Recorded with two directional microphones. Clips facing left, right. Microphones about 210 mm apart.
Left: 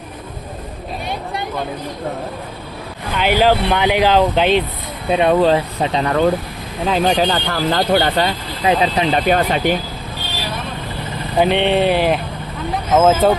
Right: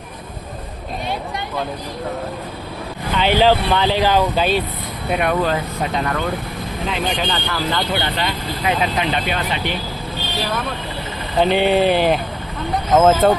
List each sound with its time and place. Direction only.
3.2 s speech: 10° left (ahead or behind); by 8.3 s 45° left (ahead or behind)
8.6 s speech: 30° left (ahead or behind)
11.3 s speech: centre (ahead or behind)